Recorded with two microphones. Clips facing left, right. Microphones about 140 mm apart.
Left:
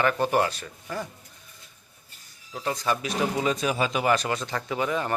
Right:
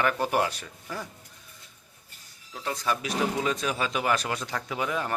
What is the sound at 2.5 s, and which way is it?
Speech, 5° left (ahead or behind).